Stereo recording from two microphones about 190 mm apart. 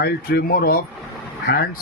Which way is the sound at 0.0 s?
55° left (ahead or behind).